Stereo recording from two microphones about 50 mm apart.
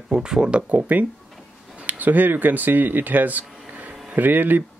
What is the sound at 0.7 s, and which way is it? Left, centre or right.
Speech, right.